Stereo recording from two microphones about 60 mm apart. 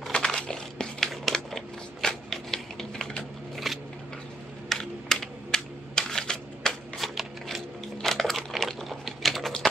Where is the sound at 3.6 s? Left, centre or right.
Centre.